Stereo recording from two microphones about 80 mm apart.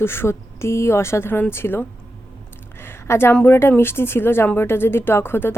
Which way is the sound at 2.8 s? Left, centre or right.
Left.